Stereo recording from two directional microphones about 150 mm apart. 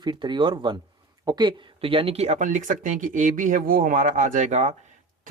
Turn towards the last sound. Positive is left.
turn(degrees=-50)  # may be behind; listen again after turning